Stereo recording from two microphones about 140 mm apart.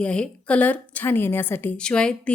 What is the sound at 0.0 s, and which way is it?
A woman's voice, 10° left (ahead or behind).